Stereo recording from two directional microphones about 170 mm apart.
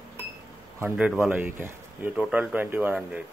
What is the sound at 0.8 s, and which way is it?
Speech, 10° right (ahead or behind).